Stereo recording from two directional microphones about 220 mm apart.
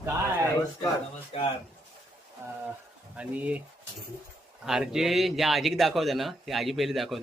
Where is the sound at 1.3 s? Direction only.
25° left (ahead or behind).